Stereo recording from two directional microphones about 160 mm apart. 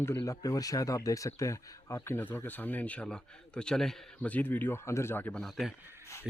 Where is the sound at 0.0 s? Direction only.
15° left (ahead or behind).